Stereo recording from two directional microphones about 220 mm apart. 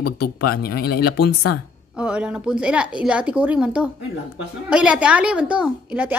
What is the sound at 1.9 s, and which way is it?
A woman's voice, 5° right (ahead or behind).